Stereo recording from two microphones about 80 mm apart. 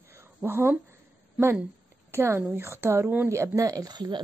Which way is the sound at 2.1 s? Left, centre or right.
Right.